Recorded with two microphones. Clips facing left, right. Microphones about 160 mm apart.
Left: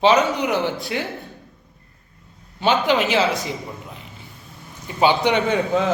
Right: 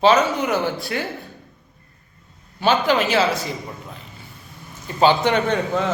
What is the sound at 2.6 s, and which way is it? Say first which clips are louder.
Speech: even; 20° left (ahead or behind).